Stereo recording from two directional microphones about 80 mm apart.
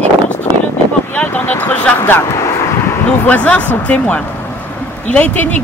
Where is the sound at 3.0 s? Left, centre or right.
Centre.